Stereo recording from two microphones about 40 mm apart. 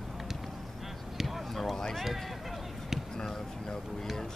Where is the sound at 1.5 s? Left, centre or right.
Centre.